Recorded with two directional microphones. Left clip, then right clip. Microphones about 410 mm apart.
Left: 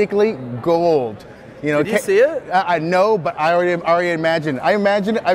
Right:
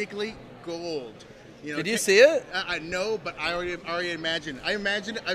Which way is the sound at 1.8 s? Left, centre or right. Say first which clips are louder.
Left 1 dB; right.